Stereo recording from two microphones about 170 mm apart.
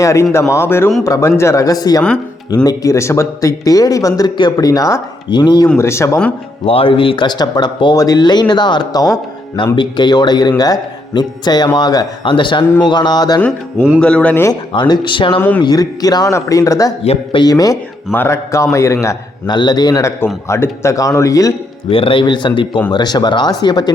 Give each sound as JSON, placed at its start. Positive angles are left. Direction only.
{"t": 0.0, "sound": "speech", "side_deg": 15}
{"t": 5.6, "sound": "speech", "side_deg": 15}
{"t": 6.7, "sound": "speech", "side_deg": 30}
{"t": 13.7, "sound": "music", "side_deg": -5}
{"t": 14.0, "sound": "speech", "side_deg": 5}
{"t": 14.7, "sound": "speech", "side_deg": 25}
{"t": 15.4, "sound": "speech", "side_deg": 10}
{"t": 15.6, "sound": "speech", "side_deg": 25}
{"t": 17.0, "sound": "a man's voice", "side_deg": 35}
{"t": 17.4, "sound": "speech", "side_deg": 20}
{"t": 21.8, "sound": "speech", "side_deg": 30}